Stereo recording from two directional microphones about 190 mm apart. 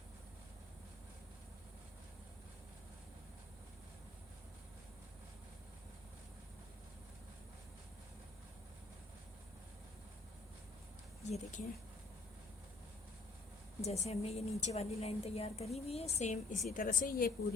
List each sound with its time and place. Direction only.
11.2 s speech: 35° left (ahead or behind)
13.8 s a woman's voice: 35° left (ahead or behind)
16.5 s a woman's voice: centre (ahead or behind)
16.7 s a woman's voice: 45° left (ahead or behind)